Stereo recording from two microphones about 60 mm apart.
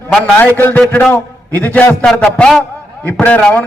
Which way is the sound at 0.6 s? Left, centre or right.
Left.